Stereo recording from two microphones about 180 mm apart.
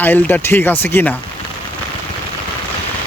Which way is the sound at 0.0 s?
10° left (ahead or behind).